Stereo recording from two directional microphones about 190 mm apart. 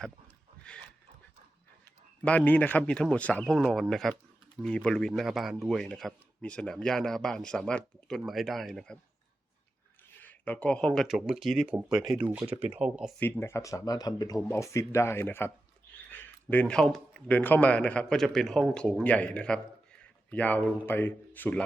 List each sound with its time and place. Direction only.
0.7 s speech: 5° left (ahead or behind)
2.2 s speech: 10° left (ahead or behind)
10.2 s speech: 10° left (ahead or behind)
13.1 s speech: 10° left (ahead or behind)